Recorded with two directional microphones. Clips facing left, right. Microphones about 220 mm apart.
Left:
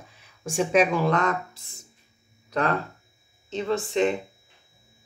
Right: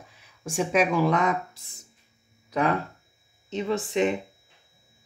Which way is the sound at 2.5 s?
10° right (ahead or behind).